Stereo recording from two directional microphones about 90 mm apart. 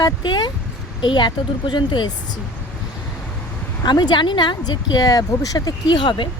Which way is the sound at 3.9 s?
55° left (ahead or behind).